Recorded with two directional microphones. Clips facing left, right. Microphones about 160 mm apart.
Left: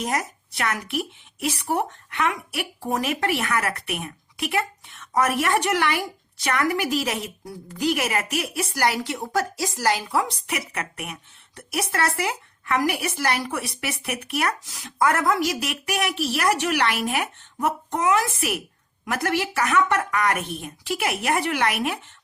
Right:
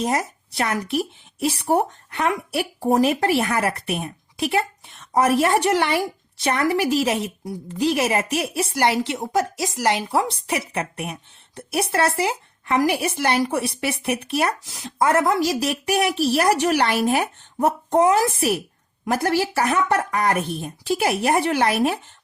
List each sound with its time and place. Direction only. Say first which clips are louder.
0.0 s a woman's voice: right 4 dB; 30° right (ahead or behind)